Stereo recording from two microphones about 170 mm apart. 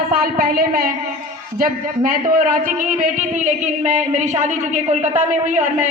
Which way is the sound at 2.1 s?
55° right (ahead or behind).